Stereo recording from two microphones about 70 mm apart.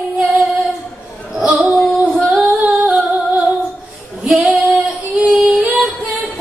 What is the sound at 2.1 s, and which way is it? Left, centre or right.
Female singing, centre.